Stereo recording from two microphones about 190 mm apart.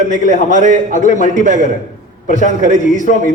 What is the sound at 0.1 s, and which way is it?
Speech, 40° right (ahead or behind).